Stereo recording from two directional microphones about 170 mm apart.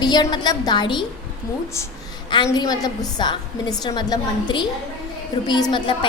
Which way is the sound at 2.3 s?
25° left (ahead or behind).